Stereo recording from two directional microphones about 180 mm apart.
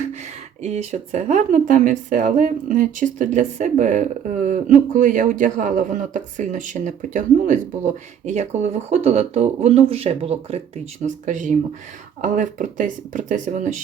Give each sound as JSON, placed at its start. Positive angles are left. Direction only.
{"t": 0.6, "sound": "speech", "side_deg": -40}